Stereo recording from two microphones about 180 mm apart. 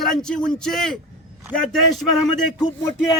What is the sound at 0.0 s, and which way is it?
Speech, centre (ahead or behind).